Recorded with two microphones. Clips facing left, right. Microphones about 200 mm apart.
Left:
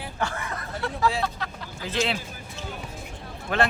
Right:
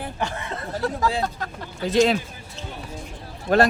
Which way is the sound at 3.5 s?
40° right (ahead or behind).